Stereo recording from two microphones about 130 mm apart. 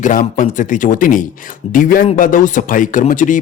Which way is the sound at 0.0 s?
90° left.